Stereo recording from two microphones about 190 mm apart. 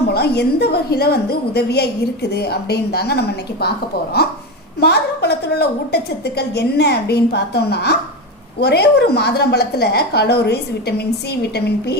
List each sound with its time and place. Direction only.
0.1 s a woman's voice: 60° left (ahead or behind)
4.8 s a woman's voice: 60° left (ahead or behind)